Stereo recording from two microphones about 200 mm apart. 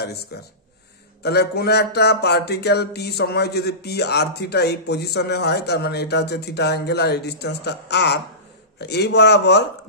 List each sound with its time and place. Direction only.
0.0 s speech: 55° left (ahead or behind)